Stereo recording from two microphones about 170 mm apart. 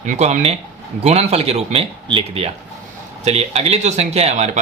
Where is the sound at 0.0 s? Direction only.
45° right (ahead or behind).